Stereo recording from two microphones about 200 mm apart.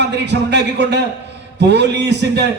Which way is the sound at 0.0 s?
60° right (ahead or behind).